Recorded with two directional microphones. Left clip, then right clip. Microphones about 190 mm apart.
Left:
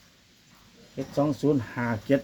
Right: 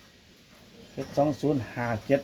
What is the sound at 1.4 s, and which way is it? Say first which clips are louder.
Speech: left 2 dB; 40° left (ahead or behind).